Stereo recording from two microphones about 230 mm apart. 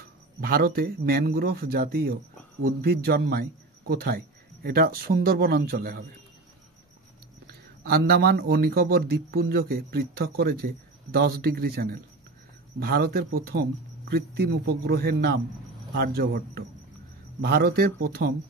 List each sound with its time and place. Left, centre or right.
0.4 s speech: right
7.8 s speech: right